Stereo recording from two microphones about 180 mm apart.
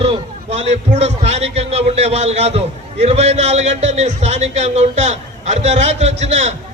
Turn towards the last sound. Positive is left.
turn(degrees=-40)  # may be behind; listen again after turning